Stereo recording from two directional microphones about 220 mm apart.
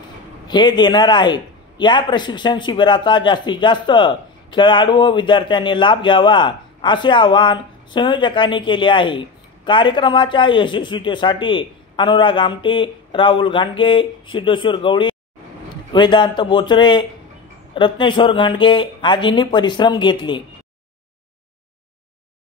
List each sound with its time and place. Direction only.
0.5 s a man's voice: 20° left (ahead or behind)